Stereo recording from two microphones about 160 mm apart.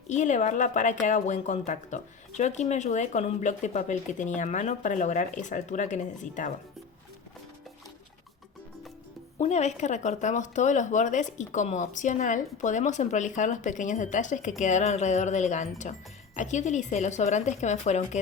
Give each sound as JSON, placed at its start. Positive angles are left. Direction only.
{"t": 0.1, "sound": "speech", "side_deg": 50}
{"t": 9.4, "sound": "speech", "side_deg": 45}